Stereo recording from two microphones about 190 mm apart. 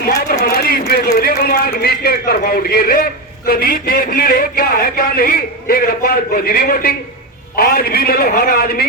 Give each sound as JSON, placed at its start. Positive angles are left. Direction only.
{"t": 0.4, "sound": "a man's voice", "side_deg": 55}